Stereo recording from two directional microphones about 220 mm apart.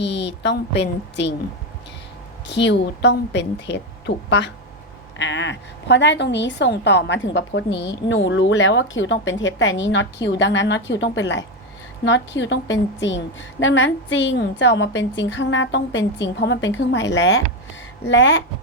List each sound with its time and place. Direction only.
0.0 s a woman's voice: 50° left (ahead or behind)
2.5 s a woman's voice: 50° left (ahead or behind)